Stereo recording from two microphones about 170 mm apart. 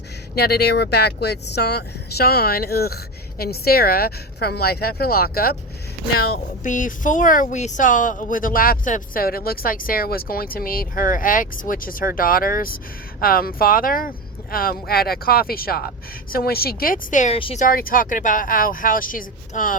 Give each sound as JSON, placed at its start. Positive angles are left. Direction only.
{"t": 0.3, "sound": "speech", "side_deg": 70}
{"t": 17.6, "sound": "speech", "side_deg": 60}